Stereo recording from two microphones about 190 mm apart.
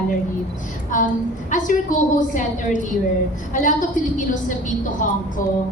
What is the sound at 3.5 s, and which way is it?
A woman's voice, 45° left (ahead or behind).